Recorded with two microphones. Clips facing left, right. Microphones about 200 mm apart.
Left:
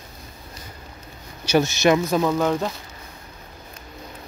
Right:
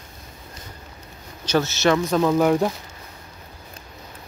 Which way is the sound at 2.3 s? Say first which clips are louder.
Right 4 dB; 10° right (ahead or behind).